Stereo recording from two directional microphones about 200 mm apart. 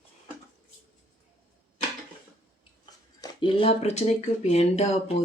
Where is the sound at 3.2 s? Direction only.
25° left (ahead or behind).